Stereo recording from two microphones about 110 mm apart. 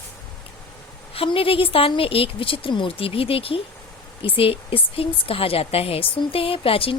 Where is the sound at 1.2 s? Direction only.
55° left (ahead or behind).